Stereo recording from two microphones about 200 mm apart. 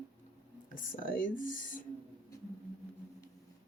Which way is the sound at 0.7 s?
40° left (ahead or behind).